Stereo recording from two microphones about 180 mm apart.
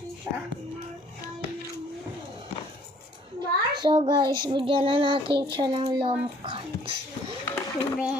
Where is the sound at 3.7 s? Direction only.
25° right (ahead or behind).